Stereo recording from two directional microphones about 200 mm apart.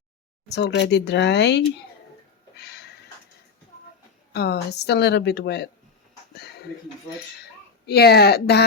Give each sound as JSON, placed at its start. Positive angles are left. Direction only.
{"t": 0.4, "sound": "a woman's voice", "side_deg": 60}
{"t": 2.6, "sound": "a sound", "side_deg": 55}
{"t": 4.3, "sound": "a woman's voice", "side_deg": 55}
{"t": 7.9, "sound": "speech", "side_deg": 55}